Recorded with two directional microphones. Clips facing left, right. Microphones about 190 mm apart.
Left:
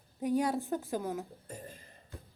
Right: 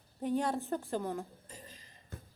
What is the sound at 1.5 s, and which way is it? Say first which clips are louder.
Beatboxing: left 7 dB; 55° left (ahead or behind).